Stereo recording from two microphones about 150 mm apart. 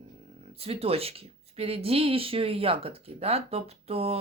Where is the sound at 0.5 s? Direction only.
40° right (ahead or behind).